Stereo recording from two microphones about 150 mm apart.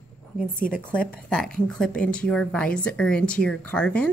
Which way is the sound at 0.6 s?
65° left (ahead or behind).